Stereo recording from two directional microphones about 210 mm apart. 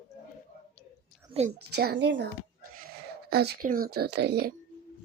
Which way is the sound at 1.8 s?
50° right (ahead or behind).